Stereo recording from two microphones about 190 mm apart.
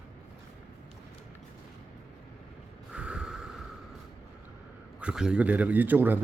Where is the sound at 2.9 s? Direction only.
5° right (ahead or behind).